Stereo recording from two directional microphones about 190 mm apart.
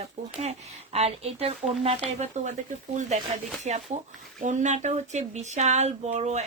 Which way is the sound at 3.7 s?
35° right (ahead or behind).